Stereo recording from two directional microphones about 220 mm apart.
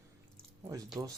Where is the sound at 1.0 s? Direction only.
15° right (ahead or behind).